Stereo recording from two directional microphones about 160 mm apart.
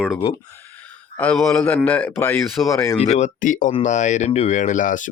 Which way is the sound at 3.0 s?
45° left (ahead or behind).